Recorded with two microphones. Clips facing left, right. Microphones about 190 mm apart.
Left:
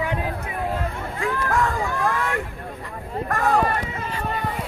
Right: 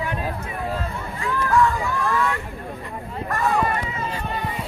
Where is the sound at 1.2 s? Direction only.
50° left (ahead or behind).